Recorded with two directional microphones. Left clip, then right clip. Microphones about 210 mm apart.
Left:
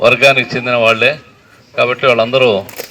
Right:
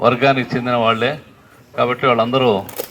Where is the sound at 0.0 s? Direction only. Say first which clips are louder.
Left 6 dB; 40° left (ahead or behind).